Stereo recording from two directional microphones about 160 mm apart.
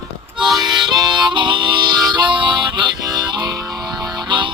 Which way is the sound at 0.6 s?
25° right (ahead or behind).